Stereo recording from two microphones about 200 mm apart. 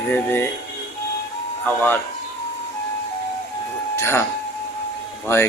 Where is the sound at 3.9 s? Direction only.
15° left (ahead or behind).